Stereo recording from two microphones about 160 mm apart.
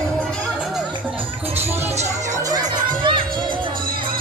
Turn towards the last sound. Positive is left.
turn(degrees=-30)  # may be behind; listen again after turning